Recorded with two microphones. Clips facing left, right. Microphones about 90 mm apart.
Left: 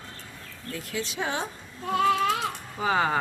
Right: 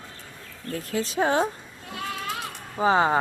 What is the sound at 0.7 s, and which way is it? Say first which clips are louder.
Speech: right 5 dB; 40° right (ahead or behind).